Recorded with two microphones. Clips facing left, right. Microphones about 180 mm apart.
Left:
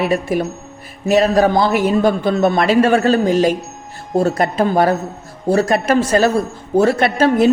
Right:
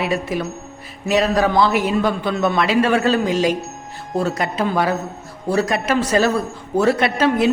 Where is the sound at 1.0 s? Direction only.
35° left (ahead or behind).